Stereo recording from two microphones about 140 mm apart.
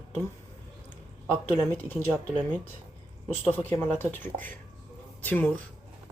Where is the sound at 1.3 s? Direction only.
15° left (ahead or behind).